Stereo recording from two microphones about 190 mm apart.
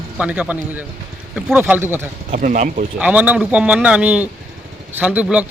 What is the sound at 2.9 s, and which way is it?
Speech, 10° right (ahead or behind).